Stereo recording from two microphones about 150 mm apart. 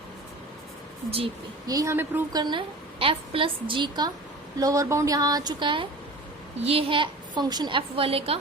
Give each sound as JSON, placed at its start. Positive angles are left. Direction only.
{"t": 1.6, "sound": "speech", "side_deg": -20}
{"t": 2.3, "sound": "a woman's voice", "side_deg": -30}